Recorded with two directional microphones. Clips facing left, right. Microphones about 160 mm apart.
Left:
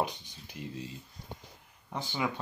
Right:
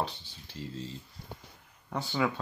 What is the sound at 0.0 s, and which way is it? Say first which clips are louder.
Speech: left 2 dB; 15° left (ahead or behind).